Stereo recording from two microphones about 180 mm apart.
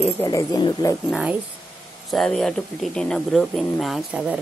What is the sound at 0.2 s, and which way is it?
Speech, 20° left (ahead or behind).